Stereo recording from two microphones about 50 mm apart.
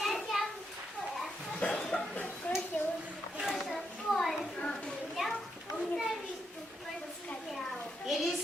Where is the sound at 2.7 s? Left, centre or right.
Left.